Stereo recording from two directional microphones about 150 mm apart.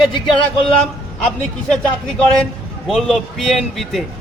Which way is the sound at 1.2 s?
5° left (ahead or behind).